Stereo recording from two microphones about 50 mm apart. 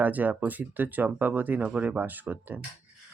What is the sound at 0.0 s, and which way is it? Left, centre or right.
Speech, right.